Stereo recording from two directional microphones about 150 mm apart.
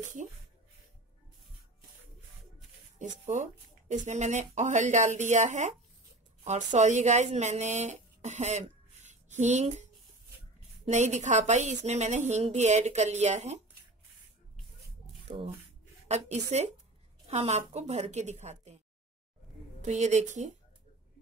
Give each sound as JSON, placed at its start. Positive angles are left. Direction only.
{"t": 0.2, "sound": "speech", "side_deg": -50}
{"t": 3.0, "sound": "speech", "side_deg": -55}
{"t": 10.9, "sound": "speech", "side_deg": -50}
{"t": 15.2, "sound": "speech", "side_deg": -40}
{"t": 19.8, "sound": "speech", "side_deg": -50}